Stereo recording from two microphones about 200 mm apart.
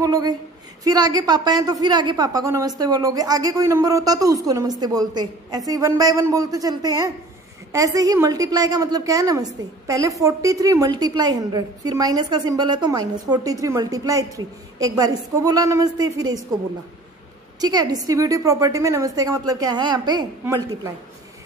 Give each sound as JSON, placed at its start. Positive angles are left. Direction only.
{"t": 0.0, "sound": "a woman's voice", "side_deg": -20}
{"t": 17.6, "sound": "a woman's voice", "side_deg": -20}